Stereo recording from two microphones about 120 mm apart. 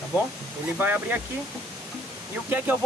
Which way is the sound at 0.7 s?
15° right (ahead or behind).